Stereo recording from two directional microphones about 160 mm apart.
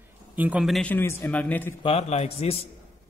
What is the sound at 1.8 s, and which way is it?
Speech, 40° left (ahead or behind).